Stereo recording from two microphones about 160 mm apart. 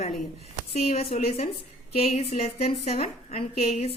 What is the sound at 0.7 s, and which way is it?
A woman's voice, 40° left (ahead or behind).